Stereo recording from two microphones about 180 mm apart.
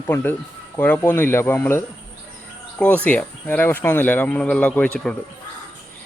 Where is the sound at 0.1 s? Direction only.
10° left (ahead or behind).